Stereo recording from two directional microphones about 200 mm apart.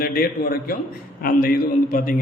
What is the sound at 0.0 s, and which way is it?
A man's voice, 50° left (ahead or behind).